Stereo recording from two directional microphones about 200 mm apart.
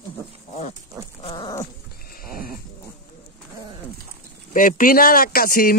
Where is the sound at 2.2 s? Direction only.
45° left (ahead or behind).